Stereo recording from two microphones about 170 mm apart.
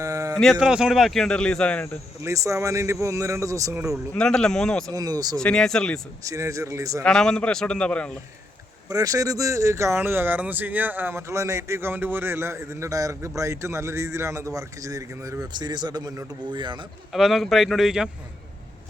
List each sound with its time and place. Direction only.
0.0 s a sound: 20° right (ahead or behind)
0.3 s speech: centre (ahead or behind)
2.2 s speech: 20° right (ahead or behind)
4.1 s speech: 5° left (ahead or behind)
4.9 s a man's voice: 20° right (ahead or behind)
5.4 s speech: 5° left (ahead or behind)
6.2 s a man's voice: 20° right (ahead or behind)
7.0 s speech: 5° left (ahead or behind)
8.9 s speech: 20° right (ahead or behind)
17.1 s speech: centre (ahead or behind)